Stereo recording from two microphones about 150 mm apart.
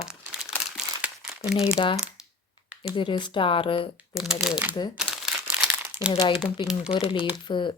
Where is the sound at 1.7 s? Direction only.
30° left (ahead or behind).